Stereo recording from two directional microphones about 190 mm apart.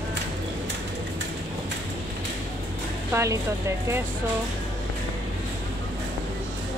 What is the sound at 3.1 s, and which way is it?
Speech, 15° right (ahead or behind).